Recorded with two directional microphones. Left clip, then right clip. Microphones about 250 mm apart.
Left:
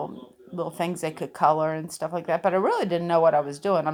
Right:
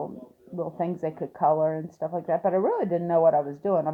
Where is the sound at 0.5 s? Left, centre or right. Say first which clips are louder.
Left 1 dB; left.